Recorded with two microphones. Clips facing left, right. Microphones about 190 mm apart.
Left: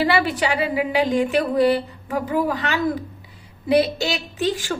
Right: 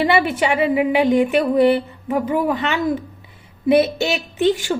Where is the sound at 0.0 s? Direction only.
20° right (ahead or behind).